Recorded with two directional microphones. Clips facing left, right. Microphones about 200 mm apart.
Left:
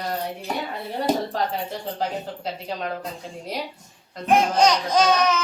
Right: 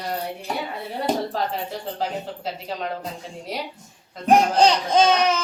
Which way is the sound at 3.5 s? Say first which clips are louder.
Even; centre (ahead or behind).